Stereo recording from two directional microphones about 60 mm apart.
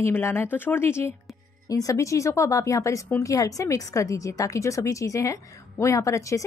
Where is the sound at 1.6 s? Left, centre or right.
Left.